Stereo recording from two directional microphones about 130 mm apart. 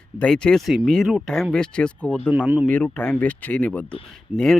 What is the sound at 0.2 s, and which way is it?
Speech, 5° left (ahead or behind).